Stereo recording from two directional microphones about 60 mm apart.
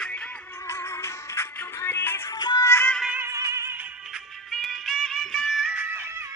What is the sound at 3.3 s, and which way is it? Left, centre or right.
Music, right.